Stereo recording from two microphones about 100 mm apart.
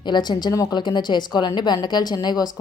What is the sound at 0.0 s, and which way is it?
A woman's voice, 50° left (ahead or behind).